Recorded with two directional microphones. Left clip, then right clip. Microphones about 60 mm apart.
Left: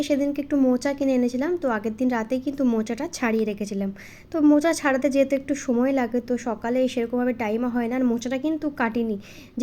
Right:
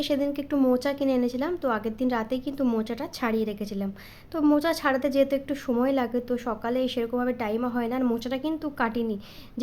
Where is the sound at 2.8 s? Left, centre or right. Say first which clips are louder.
Left 3 dB; left.